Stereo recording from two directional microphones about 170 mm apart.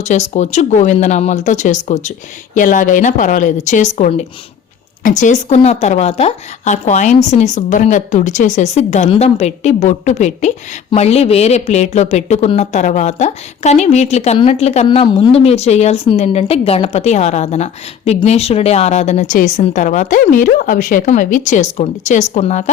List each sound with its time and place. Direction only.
0.0 s a woman's voice: 45° left (ahead or behind)
14.8 s a woman's voice: 25° left (ahead or behind); by 22.7 s 45° left (ahead or behind)